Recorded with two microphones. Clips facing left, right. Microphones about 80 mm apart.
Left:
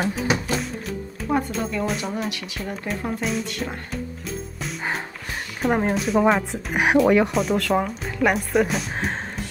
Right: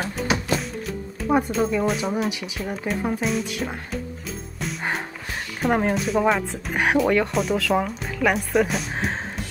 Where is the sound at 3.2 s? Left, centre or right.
Centre.